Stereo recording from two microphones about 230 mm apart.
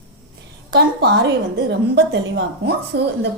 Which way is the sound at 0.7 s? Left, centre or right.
Right.